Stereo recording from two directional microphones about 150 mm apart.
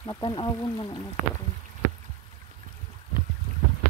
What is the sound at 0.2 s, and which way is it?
Speech, 35° left (ahead or behind).